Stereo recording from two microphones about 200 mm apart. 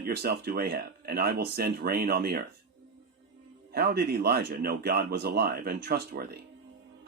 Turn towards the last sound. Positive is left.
turn(degrees=-50)  # may be behind; listen again after turning